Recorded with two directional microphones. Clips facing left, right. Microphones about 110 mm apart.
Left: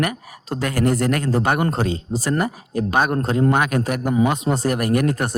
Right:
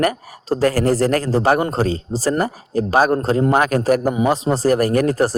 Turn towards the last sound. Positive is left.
turn(degrees=-35)  # may be behind; listen again after turning